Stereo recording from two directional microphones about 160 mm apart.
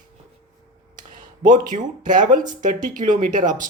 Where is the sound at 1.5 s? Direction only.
55° right (ahead or behind).